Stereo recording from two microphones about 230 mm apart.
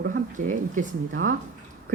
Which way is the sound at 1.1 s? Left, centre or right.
Right.